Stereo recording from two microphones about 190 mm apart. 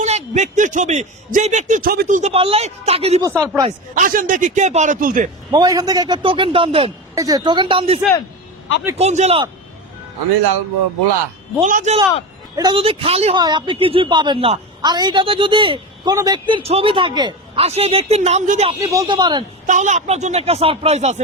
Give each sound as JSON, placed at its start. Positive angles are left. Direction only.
{"t": 0.0, "sound": "a man's voice", "side_deg": -35}
{"t": 3.2, "sound": "speech", "side_deg": -15}
{"t": 3.9, "sound": "a man's voice", "side_deg": -45}
{"t": 5.5, "sound": "a man's voice", "side_deg": -20}
{"t": 11.6, "sound": "a man's voice", "side_deg": -40}
{"t": 12.5, "sound": "a man's voice", "side_deg": -25}
{"t": 18.7, "sound": "a man's voice", "side_deg": -20}
{"t": 19.6, "sound": "a man's voice", "side_deg": -40}